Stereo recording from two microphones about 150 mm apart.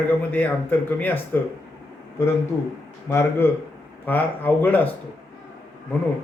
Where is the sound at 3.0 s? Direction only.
15° left (ahead or behind).